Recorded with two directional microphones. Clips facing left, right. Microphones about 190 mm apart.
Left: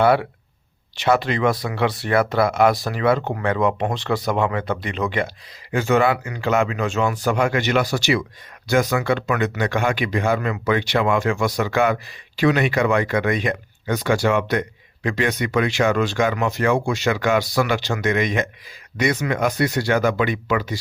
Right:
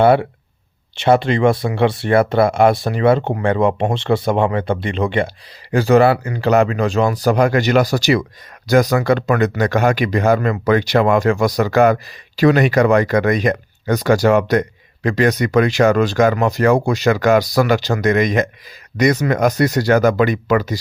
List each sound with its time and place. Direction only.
0.0 s speech: 25° right (ahead or behind)